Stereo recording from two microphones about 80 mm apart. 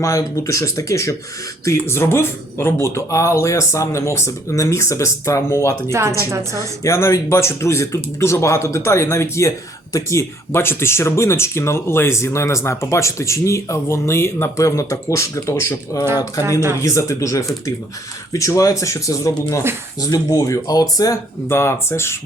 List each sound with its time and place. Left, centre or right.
0.0 s speech: left
5.9 s speech: right
6.8 s speech: left
16.4 s speech: right
16.8 s speech: left
21.5 s speech: left